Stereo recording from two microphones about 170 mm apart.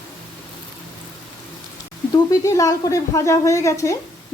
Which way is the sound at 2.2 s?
20° left (ahead or behind).